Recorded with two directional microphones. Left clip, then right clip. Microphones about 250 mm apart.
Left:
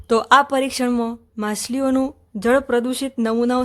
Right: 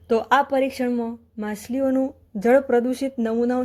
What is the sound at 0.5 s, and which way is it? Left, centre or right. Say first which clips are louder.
Speech: left 2 dB; centre.